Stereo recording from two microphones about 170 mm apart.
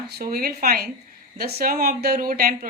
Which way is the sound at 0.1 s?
60° right (ahead or behind).